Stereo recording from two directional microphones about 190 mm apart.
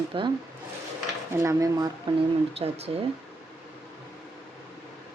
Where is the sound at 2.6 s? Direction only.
35° right (ahead or behind).